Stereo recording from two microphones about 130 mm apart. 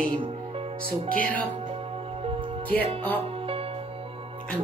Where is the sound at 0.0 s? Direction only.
40° right (ahead or behind).